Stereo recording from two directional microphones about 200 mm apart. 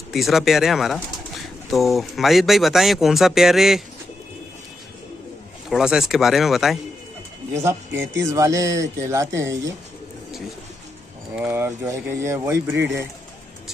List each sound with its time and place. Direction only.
0.1 s speech: centre (ahead or behind)
5.7 s speech: 5° right (ahead or behind)
7.5 s speech: 15° right (ahead or behind)
11.3 s speech: 10° right (ahead or behind)